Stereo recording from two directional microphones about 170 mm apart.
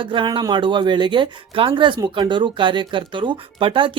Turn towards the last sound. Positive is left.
turn(degrees=-30)  # may be behind; listen again after turning